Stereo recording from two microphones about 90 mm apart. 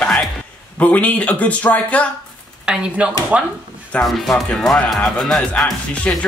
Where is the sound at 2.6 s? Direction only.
10° right (ahead or behind).